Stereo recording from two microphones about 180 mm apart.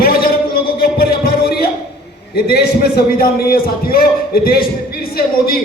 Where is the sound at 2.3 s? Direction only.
60° left (ahead or behind).